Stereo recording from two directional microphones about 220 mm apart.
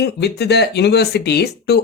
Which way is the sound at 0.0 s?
50° left (ahead or behind).